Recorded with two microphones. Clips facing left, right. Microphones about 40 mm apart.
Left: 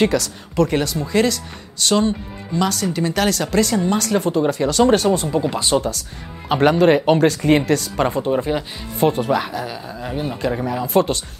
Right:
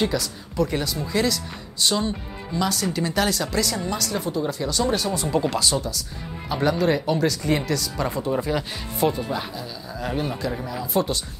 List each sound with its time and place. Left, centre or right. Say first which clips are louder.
0.1 s speech: left 6 dB; left
3.1 s speech: left 4 dB; left
10.0 s a man's voice: left 1 dB; centre
10.6 s speech: left 8 dB; left